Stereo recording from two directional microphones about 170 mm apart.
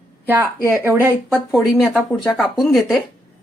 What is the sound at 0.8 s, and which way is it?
Speech, 15° right (ahead or behind).